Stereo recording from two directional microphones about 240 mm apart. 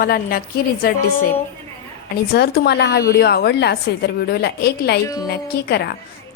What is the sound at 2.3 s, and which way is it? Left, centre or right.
A woman's voice, left.